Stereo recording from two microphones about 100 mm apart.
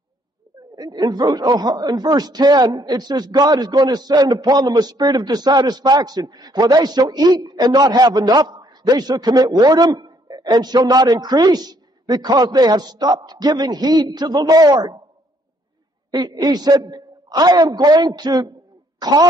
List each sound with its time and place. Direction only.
0.7 s speech: 45° right (ahead or behind)
16.1 s speech: 40° right (ahead or behind)